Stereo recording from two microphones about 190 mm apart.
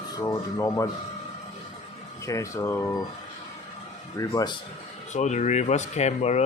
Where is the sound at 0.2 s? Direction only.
20° left (ahead or behind).